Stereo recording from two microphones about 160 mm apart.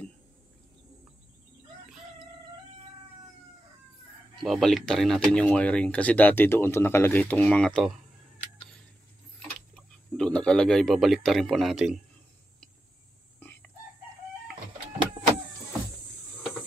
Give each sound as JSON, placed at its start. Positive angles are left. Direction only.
{"t": 4.4, "sound": "speech", "side_deg": 0}
{"t": 9.8, "sound": "speech", "side_deg": 5}
{"t": 13.4, "sound": "chicken", "side_deg": 10}